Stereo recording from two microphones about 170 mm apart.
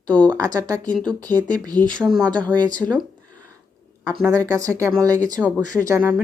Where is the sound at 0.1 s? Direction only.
5° left (ahead or behind).